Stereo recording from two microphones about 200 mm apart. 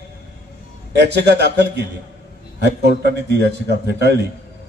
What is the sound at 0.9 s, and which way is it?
A man's voice, 55° right (ahead or behind).